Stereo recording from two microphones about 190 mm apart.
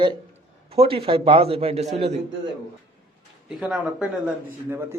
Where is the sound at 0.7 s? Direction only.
30° right (ahead or behind).